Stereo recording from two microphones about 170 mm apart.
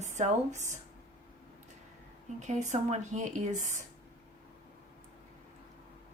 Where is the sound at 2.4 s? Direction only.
45° right (ahead or behind).